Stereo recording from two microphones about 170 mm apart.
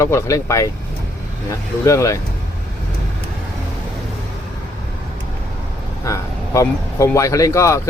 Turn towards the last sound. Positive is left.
turn(degrees=15)  # may be behind; listen again after turning